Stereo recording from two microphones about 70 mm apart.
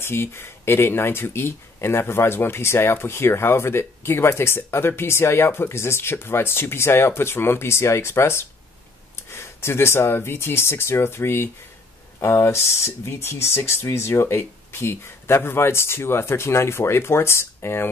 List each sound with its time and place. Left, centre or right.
0.0 s speech: left